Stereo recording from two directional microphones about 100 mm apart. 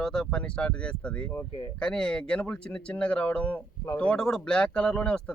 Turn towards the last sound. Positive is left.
turn(degrees=10)  # may be behind; listen again after turning